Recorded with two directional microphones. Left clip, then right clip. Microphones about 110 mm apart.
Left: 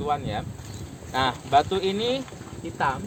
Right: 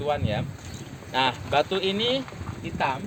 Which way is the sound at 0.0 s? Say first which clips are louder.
Even; 20° left (ahead or behind).